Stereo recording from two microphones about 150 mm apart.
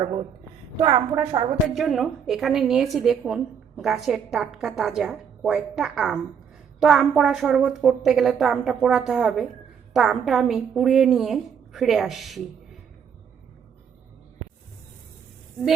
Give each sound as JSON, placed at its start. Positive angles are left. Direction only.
{"t": 0.0, "sound": "a woman's voice", "side_deg": -35}
{"t": 1.7, "sound": "a woman's voice", "side_deg": 0}